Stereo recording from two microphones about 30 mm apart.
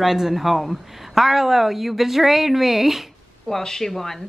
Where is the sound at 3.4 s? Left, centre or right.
Centre.